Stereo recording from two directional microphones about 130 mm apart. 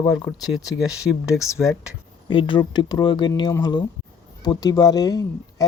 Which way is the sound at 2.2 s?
40° left (ahead or behind).